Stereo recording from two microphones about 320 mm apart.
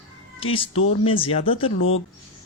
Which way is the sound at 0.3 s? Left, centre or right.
Centre.